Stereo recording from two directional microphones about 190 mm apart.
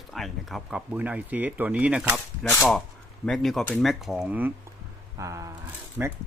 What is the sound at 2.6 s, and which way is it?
Speech, 5° left (ahead or behind).